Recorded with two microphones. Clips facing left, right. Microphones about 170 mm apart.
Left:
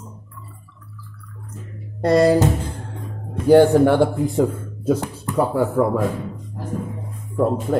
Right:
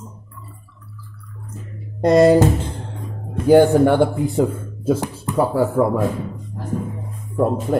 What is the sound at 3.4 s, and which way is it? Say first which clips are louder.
Speech: even; 5° right (ahead or behind).